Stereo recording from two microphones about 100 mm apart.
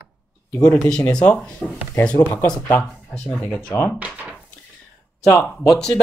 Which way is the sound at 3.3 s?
Centre (ahead or behind).